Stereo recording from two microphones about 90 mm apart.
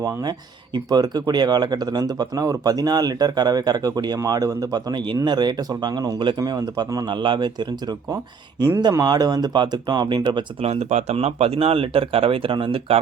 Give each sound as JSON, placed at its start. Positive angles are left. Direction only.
{"t": 0.0, "sound": "speech", "side_deg": -50}
{"t": 11.4, "sound": "speech", "side_deg": -90}